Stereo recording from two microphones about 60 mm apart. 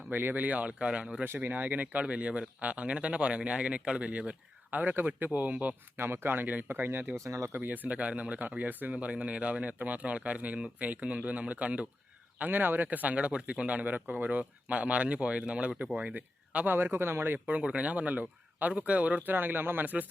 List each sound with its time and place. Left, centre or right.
0.1 s speech: right; by 1.2 s centre
1.2 s speech: right; by 4.4 s centre
4.7 s speech: right
6.0 s speech: right
7.3 s speech: right
7.5 s speech: right
17.6 s speech: centre